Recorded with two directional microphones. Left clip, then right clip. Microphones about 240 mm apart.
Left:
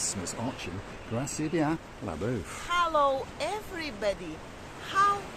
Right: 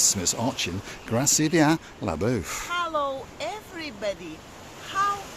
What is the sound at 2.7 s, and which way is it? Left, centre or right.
Speech, centre.